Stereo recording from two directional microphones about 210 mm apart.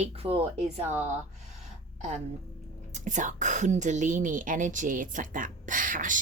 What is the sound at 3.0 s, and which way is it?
A woman's voice, 35° right (ahead or behind).